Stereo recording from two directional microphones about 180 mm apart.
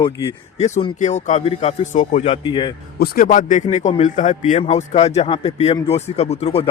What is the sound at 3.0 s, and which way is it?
Speech, 50° left (ahead or behind).